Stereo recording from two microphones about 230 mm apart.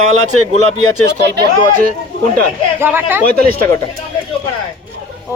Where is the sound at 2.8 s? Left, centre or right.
Centre.